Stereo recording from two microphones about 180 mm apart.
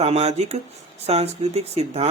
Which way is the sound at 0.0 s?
35° right (ahead or behind).